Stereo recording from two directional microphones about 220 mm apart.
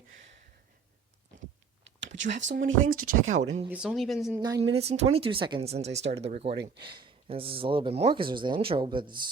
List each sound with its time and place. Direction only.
2.4 s speech: 55° right (ahead or behind)
2.8 s speech: 40° right (ahead or behind)
3.7 s speech: centre (ahead or behind)
4.4 s speech: 15° right (ahead or behind)
4.7 s speech: 30° right (ahead or behind)
6.5 s speech: 50° right (ahead or behind)
6.8 s speech: 20° right (ahead or behind)